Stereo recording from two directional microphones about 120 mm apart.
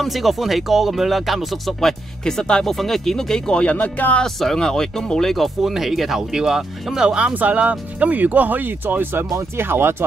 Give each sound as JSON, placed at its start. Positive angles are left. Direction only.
{"t": 0.0, "sound": "speech", "side_deg": 0}